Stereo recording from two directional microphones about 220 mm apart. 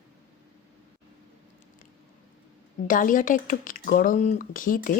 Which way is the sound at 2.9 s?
40° left (ahead or behind).